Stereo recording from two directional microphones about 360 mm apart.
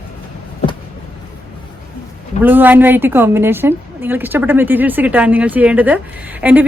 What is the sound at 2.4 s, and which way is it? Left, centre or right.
A woman's voice, centre.